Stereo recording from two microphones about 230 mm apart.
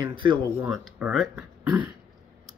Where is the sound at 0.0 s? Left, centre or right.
Right.